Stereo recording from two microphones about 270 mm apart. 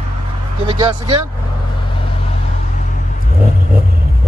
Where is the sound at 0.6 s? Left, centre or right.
Centre.